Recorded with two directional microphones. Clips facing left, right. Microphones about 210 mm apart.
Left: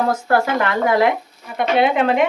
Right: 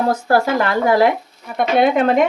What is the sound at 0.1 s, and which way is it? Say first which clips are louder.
A woman's voice: right 2 dB; 35° right (ahead or behind).